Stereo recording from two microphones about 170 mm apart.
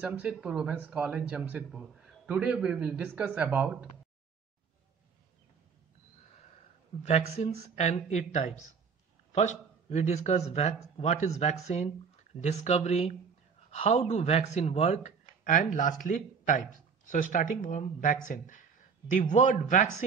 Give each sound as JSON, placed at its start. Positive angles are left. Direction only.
{"t": 0.0, "sound": "a man's voice", "side_deg": -10}
{"t": 7.0, "sound": "speech", "side_deg": 45}